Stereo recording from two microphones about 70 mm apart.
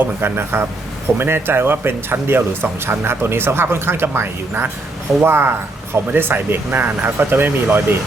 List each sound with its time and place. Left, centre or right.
0.2 s speech: right